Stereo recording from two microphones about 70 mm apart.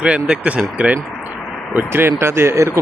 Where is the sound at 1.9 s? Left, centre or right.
Right.